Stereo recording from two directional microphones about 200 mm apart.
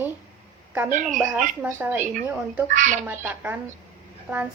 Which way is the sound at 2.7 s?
40° right (ahead or behind).